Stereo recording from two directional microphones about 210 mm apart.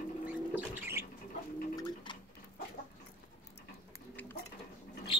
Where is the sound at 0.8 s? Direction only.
10° right (ahead or behind).